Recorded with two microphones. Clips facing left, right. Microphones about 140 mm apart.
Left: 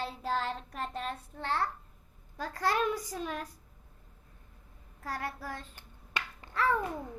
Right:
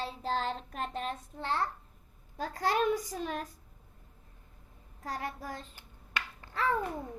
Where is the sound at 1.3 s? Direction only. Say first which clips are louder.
Left 1 dB; 35° right (ahead or behind).